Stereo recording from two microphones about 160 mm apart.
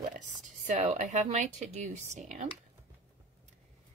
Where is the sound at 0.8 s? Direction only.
45° right (ahead or behind).